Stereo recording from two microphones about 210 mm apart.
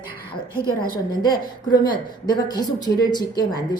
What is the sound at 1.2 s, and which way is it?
Speech, 20° left (ahead or behind).